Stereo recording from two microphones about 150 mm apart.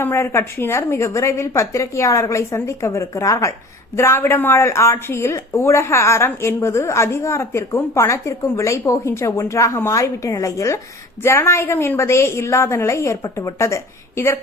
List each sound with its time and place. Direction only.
0.0 s a woman's voice: 15° left (ahead or behind)